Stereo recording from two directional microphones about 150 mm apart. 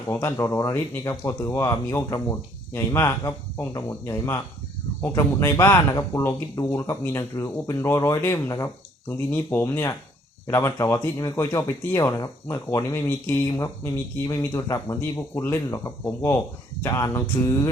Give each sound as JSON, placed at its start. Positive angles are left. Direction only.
{"t": 0.1, "sound": "speech", "side_deg": 15}